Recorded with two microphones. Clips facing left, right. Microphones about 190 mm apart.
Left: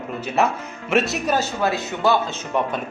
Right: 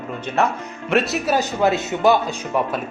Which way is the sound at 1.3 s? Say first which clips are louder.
Right 6 dB; 20° right (ahead or behind).